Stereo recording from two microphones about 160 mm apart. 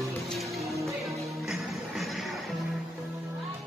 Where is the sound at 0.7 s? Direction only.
20° right (ahead or behind).